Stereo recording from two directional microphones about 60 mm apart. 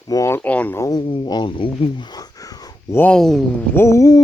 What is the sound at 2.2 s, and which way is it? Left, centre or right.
Wheeze, left.